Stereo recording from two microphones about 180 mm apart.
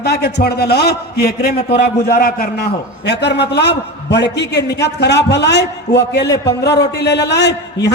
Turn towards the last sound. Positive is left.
turn(degrees=70)  # may be behind; listen again after turning